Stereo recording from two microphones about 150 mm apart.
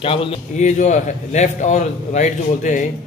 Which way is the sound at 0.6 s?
50° left (ahead or behind).